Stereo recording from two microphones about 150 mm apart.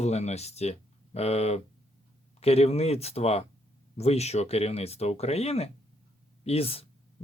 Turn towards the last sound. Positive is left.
turn(degrees=40)  # may be behind; listen again after turning